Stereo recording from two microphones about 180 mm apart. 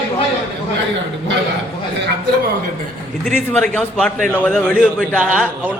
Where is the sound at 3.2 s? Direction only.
5° left (ahead or behind).